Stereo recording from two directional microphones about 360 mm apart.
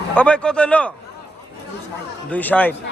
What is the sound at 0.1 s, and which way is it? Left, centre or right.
Speech, centre.